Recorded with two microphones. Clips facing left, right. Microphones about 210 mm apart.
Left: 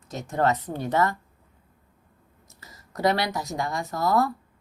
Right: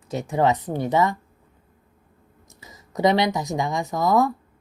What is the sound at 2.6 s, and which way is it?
A woman's voice, 20° right (ahead or behind).